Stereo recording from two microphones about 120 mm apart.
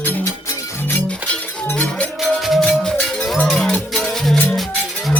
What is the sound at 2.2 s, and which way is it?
Music, centre (ahead or behind).